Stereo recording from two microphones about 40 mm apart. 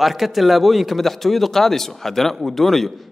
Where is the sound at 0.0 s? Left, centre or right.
Centre.